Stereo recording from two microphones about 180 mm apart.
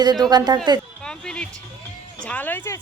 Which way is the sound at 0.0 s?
25° right (ahead or behind).